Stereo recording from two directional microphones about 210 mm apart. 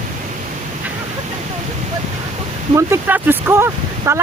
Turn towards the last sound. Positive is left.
turn(degrees=-10)  # may be behind; listen again after turning